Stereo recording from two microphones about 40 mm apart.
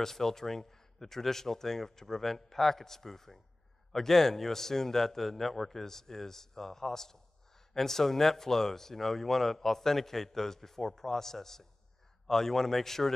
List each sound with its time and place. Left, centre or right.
0.0 s speech: centre